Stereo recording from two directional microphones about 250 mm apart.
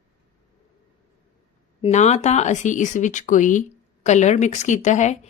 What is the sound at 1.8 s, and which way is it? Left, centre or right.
A woman's voice, left.